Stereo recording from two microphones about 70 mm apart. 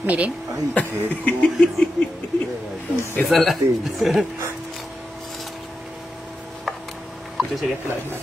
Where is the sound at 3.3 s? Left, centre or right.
Centre.